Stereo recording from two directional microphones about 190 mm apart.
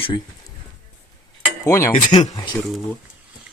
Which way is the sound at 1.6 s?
15° left (ahead or behind).